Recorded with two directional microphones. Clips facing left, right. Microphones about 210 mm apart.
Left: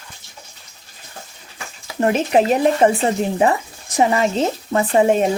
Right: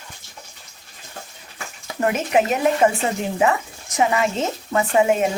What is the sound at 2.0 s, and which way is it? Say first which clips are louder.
Speech: left 3 dB; 35° left (ahead or behind).